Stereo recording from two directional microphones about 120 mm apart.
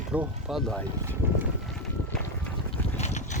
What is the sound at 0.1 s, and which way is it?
Speech, 10° right (ahead or behind).